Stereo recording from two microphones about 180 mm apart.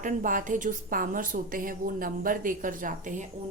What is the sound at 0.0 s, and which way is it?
A woman's voice, 45° right (ahead or behind).